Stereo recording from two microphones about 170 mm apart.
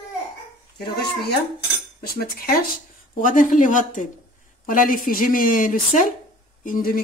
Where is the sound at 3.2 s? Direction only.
50° left (ahead or behind).